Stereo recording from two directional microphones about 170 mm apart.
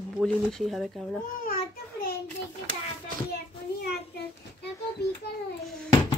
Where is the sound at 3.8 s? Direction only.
75° left (ahead or behind).